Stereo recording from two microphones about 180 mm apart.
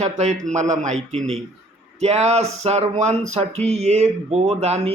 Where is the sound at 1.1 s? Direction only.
Centre (ahead or behind).